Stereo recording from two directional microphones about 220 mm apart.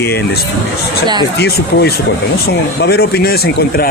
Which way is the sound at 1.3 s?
45° left (ahead or behind).